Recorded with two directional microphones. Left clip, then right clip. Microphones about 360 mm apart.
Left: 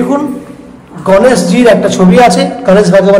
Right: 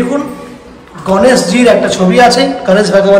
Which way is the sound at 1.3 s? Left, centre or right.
Centre.